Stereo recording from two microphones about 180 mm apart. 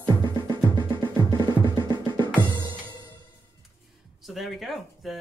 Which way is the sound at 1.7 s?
25° left (ahead or behind).